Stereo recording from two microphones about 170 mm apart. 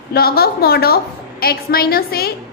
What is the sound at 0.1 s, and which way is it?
A woman's voice, 65° left (ahead or behind).